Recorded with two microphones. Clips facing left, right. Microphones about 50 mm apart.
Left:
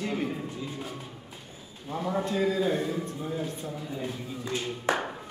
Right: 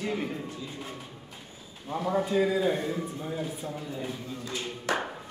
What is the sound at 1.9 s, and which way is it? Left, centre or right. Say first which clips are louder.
A man's voice: right 2 dB; centre.